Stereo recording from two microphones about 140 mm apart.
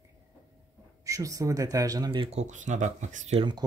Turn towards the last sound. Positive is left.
turn(degrees=-35)  # may be behind; listen again after turning